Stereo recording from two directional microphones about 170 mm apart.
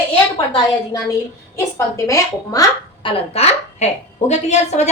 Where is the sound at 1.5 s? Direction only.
20° left (ahead or behind).